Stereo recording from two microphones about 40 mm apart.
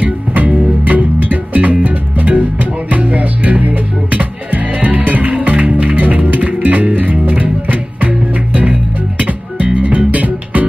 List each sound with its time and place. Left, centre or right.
0.0 s music: right
9.8 s music: right